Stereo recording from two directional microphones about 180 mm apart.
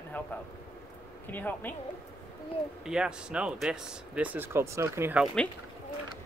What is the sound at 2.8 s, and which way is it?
Speech, 5° right (ahead or behind).